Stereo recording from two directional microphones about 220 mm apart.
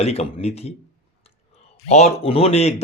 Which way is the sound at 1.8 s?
30° left (ahead or behind).